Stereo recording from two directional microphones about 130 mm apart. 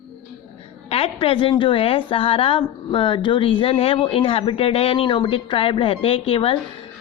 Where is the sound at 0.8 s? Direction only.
50° left (ahead or behind).